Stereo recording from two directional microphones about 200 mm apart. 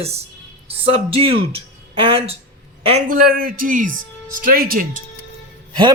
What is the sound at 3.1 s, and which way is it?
Speech, 45° right (ahead or behind).